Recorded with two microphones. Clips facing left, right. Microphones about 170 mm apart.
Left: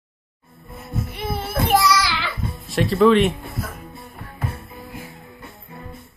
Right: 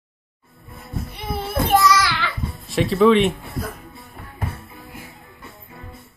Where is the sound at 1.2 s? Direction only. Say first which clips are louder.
Right 1 dB; 10° left (ahead or behind).